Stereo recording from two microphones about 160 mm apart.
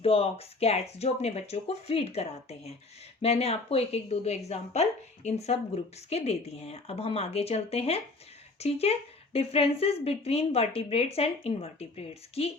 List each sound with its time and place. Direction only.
0.0 s a woman's voice: 40° left (ahead or behind)